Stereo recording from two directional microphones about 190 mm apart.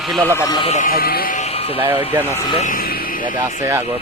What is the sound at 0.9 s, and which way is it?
Speech, 50° left (ahead or behind).